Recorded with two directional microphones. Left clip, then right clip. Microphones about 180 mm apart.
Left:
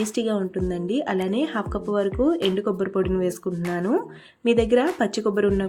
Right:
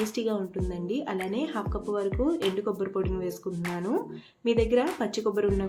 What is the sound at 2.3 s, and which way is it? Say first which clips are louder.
Speech: left 5 dB; centre (ahead or behind).